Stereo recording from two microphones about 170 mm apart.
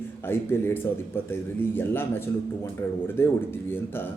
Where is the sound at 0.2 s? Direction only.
15° left (ahead or behind).